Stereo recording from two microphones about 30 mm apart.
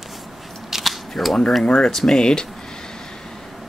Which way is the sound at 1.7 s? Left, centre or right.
Centre.